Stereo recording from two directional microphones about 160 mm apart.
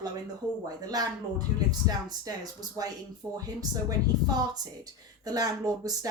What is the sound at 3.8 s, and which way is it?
Speech, 25° right (ahead or behind).